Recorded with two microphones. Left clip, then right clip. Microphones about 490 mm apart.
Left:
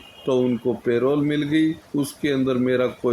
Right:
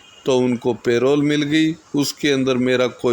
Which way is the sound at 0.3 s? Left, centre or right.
Centre.